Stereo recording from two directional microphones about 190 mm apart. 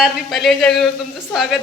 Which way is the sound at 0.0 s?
Centre (ahead or behind).